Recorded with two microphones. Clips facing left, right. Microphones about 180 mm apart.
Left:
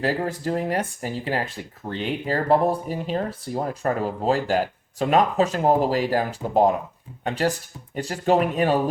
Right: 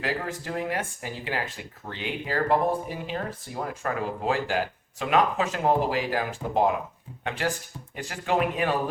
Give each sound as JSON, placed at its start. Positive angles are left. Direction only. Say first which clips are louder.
{"t": 0.0, "sound": "speech", "louder": "left 6 dB", "side_deg": 35}